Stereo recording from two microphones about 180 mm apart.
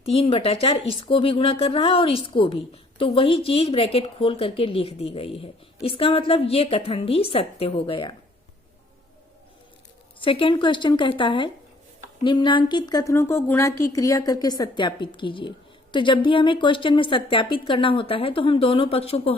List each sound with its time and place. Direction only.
0.0 s speech: 30° left (ahead or behind)
10.2 s a woman's voice: 30° left (ahead or behind)